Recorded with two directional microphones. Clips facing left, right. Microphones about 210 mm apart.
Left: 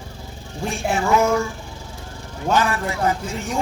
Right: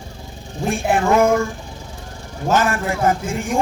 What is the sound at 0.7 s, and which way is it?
Music, 55° right (ahead or behind).